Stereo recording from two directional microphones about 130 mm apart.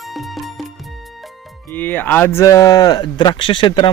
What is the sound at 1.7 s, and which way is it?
A man's voice, 15° left (ahead or behind).